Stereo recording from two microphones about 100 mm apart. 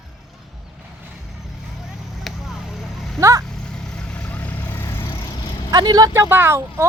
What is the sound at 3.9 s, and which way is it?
Vehicle, 15° left (ahead or behind).